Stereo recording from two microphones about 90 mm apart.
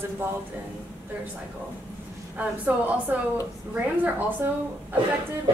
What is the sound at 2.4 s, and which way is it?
Speech, 20° right (ahead or behind).